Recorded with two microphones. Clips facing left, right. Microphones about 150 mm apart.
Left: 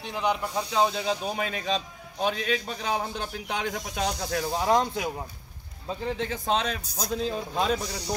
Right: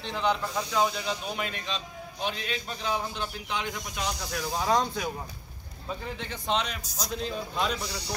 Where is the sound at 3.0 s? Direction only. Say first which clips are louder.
Left 2 dB; 50° left (ahead or behind).